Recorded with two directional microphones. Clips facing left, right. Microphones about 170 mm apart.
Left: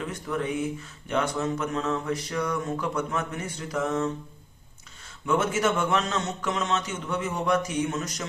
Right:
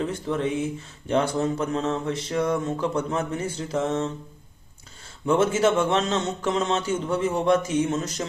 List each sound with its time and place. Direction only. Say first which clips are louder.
0.0 s speech: right 4 dB; 25° right (ahead or behind)
5.2 s speech: right 4 dB; 30° right (ahead or behind)